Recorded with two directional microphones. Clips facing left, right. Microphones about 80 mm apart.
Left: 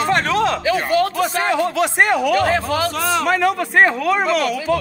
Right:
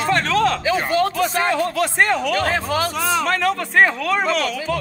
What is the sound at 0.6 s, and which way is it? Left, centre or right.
Speech, right.